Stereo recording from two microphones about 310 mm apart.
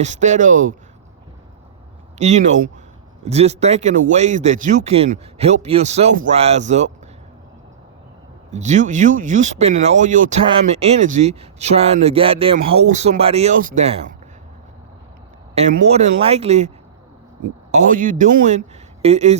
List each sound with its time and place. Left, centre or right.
0.0 s speech: right
2.1 s speech: right
8.5 s speech: right
15.5 s speech: right